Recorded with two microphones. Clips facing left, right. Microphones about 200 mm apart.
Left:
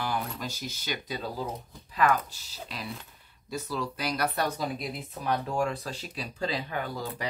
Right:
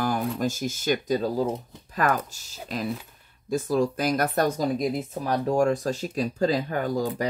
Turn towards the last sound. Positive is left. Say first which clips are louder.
# right 8 dB
turn(degrees=-45)  # may be behind; listen again after turning